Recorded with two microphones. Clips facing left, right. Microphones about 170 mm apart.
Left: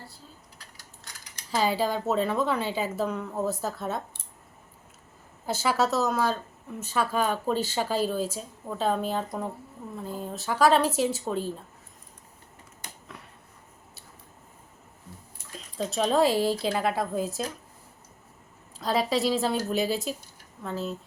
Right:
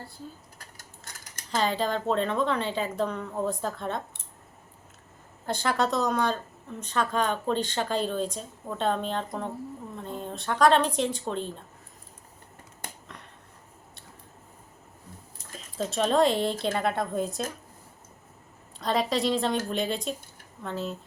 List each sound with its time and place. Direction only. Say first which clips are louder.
0.6 s mechanisms: right 2 dB; 50° right (ahead or behind)
1.5 s speech: left 1 dB; 10° left (ahead or behind)
5.5 s speech: left 1 dB; 5° left (ahead or behind)
12.8 s a sound: right 5 dB; 50° right (ahead or behind)
15.5 s speech: even; centre (ahead or behind)
18.8 s speech: left 1 dB; centre (ahead or behind)